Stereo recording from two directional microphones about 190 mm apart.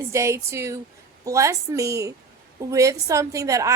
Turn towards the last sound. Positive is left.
turn(degrees=-15)  # may be behind; listen again after turning